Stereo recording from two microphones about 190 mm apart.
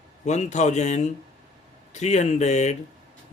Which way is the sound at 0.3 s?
40° left (ahead or behind).